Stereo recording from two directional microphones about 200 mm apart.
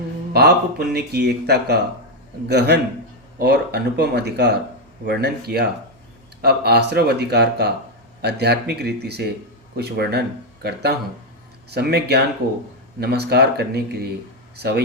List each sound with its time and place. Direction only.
0.3 s speech: 55° right (ahead or behind)